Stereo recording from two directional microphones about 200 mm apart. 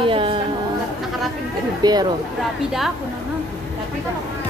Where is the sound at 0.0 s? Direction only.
25° right (ahead or behind).